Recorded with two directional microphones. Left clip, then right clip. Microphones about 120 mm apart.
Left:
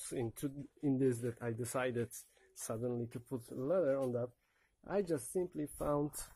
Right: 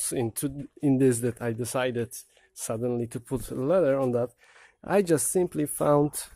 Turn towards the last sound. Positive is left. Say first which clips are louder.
# right 14 dB
turn(degrees=-90)